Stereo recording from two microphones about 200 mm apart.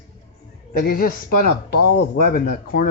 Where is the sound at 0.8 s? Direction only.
45° left (ahead or behind).